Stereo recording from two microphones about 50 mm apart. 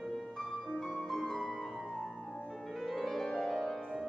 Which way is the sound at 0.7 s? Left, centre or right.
Centre.